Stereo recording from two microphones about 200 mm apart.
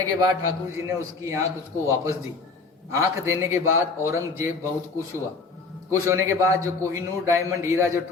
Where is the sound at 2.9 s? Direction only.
15° right (ahead or behind).